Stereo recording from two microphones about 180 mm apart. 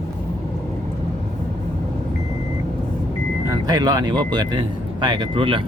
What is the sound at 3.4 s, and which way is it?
Speech, 25° right (ahead or behind).